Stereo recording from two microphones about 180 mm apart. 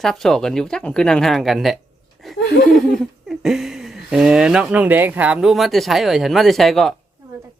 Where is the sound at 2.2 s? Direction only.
Centre (ahead or behind).